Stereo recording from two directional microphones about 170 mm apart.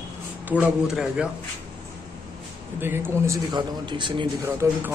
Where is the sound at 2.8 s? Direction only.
15° right (ahead or behind); by 4.3 s 30° right (ahead or behind).